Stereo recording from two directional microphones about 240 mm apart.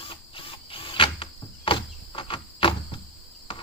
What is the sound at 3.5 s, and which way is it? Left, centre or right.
Cricket, left.